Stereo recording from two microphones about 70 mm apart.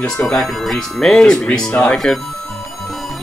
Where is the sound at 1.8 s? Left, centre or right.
Centre.